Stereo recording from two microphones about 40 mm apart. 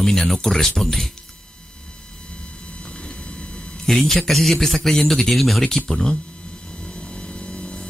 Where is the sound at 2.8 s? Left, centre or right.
Centre.